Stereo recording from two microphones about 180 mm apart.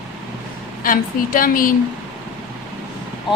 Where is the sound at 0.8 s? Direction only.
50° left (ahead or behind).